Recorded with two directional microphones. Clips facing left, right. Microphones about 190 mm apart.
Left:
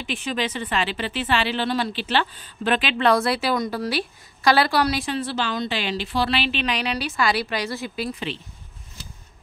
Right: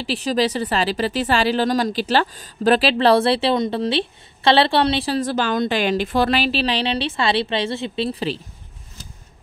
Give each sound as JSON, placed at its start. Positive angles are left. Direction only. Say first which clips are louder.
{"t": 0.0, "sound": "speech", "louder": "right 6 dB", "side_deg": -35}